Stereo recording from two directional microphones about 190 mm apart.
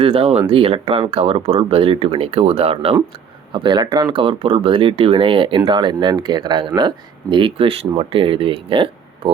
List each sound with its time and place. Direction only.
0.0 s speech: 30° right (ahead or behind)